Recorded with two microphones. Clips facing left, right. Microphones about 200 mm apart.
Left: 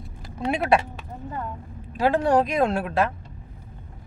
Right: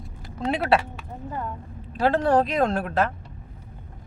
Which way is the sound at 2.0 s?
10° left (ahead or behind).